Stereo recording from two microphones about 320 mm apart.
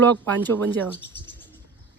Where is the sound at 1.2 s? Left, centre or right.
Centre.